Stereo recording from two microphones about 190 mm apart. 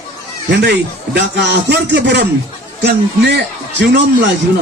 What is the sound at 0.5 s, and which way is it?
A man's voice, 60° right (ahead or behind).